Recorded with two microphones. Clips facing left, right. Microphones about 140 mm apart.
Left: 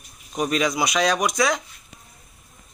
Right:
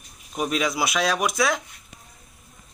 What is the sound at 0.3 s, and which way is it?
Speech, 5° right (ahead or behind).